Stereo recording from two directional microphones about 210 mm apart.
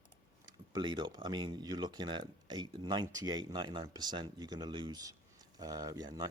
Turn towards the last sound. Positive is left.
turn(degrees=-20)  # may be behind; listen again after turning